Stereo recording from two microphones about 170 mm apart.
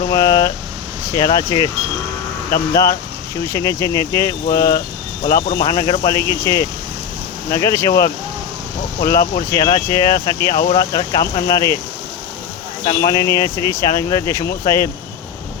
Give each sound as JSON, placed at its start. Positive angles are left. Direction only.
{"t": 0.1, "sound": "a sound", "side_deg": 20}
{"t": 1.1, "sound": "speech", "side_deg": 20}
{"t": 2.7, "sound": "speech", "side_deg": 20}
{"t": 12.8, "sound": "speech", "side_deg": 25}